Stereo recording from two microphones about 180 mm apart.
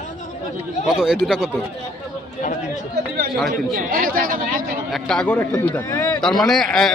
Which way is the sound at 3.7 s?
50° right (ahead or behind).